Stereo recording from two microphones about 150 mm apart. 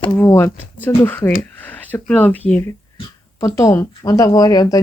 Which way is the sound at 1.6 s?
10° left (ahead or behind).